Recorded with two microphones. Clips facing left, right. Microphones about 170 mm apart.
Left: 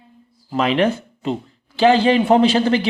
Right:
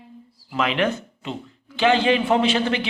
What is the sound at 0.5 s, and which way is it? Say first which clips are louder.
A man's voice: left 5 dB; 35° left (ahead or behind).